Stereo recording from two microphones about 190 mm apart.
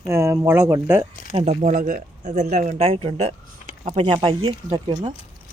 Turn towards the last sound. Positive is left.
turn(degrees=-25)  # may be behind; listen again after turning